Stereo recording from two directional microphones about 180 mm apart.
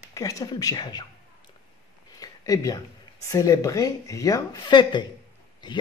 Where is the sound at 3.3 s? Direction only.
20° left (ahead or behind).